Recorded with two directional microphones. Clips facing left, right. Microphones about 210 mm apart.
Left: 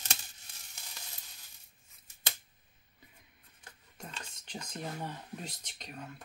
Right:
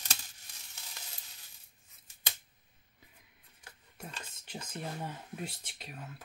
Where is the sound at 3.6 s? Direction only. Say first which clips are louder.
Right 1 dB; 5° right (ahead or behind).